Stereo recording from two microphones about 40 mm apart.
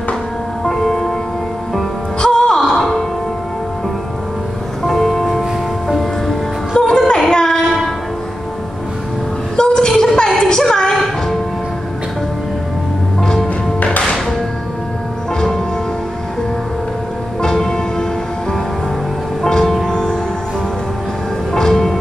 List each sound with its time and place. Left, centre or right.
0.7 s music: centre
2.1 s music: centre
4.8 s music: centre
6.8 s female singing: centre
9.6 s a sound: centre
13.2 s music: centre
17.6 s music: centre
19.4 s music: centre
21.5 s music: centre